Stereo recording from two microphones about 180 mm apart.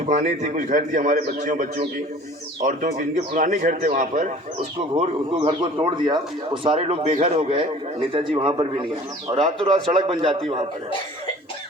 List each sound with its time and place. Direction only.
0.0 s a man's voice: 40° right (ahead or behind)
3.3 s a man's voice: 50° right (ahead or behind); by 10.3 s 30° right (ahead or behind)